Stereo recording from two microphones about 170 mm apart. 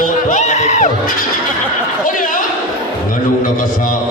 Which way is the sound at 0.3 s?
45° left (ahead or behind).